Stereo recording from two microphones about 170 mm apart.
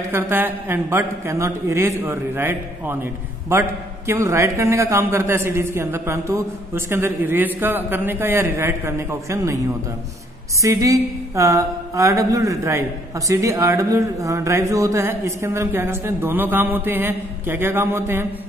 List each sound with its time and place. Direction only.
0.1 s a man's voice: 15° right (ahead or behind)
10.6 s a man's voice: 20° right (ahead or behind)